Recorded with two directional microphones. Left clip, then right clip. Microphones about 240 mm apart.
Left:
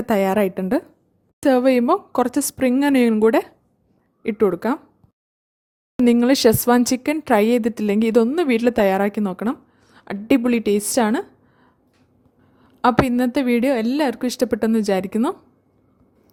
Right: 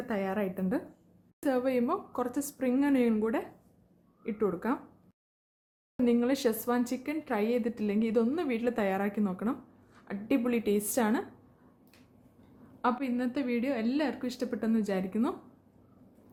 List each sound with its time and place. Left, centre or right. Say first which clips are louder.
0.1 s speech: left 15 dB; left
6.1 s speech: left 13 dB; left
12.8 s speech: left 14 dB; left